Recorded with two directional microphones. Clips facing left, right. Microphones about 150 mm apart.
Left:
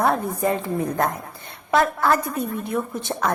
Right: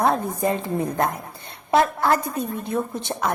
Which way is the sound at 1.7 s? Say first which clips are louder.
Even; 30° right (ahead or behind).